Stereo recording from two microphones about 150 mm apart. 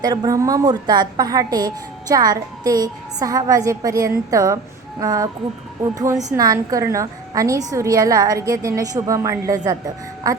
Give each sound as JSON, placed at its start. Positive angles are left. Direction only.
{"t": 0.0, "sound": "a woman's voice", "side_deg": -25}